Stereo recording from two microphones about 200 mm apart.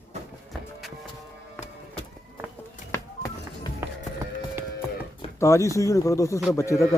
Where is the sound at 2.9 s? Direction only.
15° left (ahead or behind).